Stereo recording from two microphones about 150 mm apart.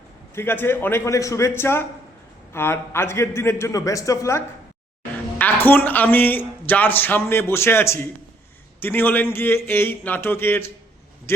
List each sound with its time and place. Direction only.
0.3 s a man's voice: 15° left (ahead or behind)